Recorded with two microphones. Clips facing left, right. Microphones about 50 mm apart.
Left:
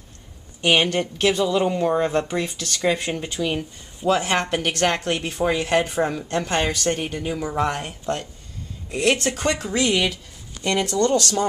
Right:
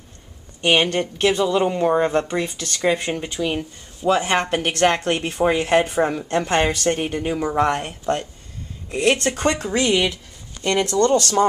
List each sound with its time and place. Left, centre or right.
0.6 s speech: centre; by 7.9 s right
8.9 s speech: centre
9.3 s speech: right
10.5 s speech: centre
11.1 s speech: right